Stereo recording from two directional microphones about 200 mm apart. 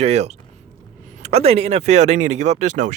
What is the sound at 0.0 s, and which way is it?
Speech, 30° right (ahead or behind).